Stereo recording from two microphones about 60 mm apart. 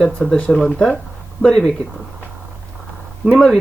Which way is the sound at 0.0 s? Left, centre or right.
Centre.